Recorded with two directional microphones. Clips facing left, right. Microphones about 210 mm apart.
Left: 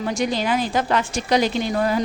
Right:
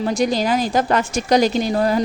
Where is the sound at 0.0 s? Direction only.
35° right (ahead or behind).